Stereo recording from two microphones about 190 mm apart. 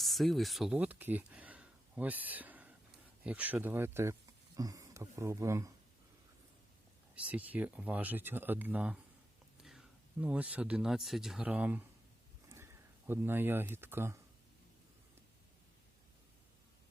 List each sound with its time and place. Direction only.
0.0 s speech: centre (ahead or behind); by 5.7 s 15° right (ahead or behind)
7.2 s speech: 10° right (ahead or behind)